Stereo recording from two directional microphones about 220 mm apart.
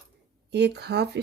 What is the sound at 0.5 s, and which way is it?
Speech, 50° right (ahead or behind).